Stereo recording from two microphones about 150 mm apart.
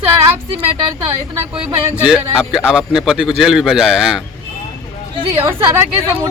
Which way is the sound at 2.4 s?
5° right (ahead or behind).